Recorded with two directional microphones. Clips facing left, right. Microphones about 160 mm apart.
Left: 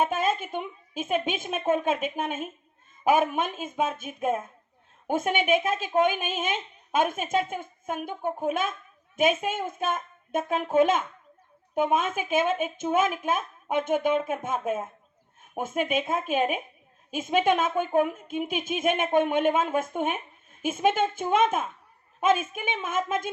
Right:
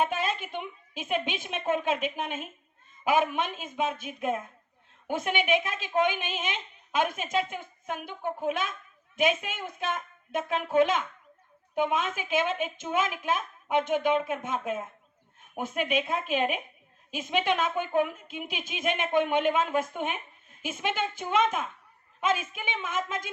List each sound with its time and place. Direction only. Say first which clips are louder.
0.0 s a woman's voice: left 3 dB; 45° left (ahead or behind)